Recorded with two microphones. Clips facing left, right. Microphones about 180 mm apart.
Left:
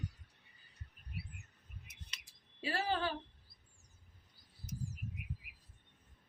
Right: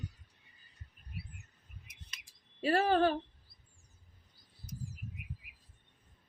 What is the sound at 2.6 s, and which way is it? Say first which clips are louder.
Speech: right 9 dB; 55° right (ahead or behind).